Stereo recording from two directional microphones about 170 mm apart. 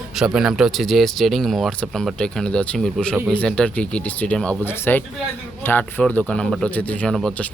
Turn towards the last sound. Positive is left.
turn(degrees=5)  # may be behind; listen again after turning